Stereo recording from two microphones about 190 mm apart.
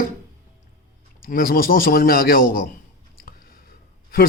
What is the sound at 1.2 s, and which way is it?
Speech, 50° left (ahead or behind).